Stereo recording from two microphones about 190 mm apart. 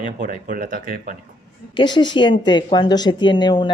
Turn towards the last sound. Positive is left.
turn(degrees=25)  # may be behind; listen again after turning